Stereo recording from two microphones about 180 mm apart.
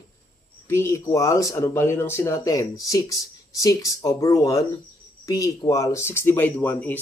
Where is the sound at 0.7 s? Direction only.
15° left (ahead or behind).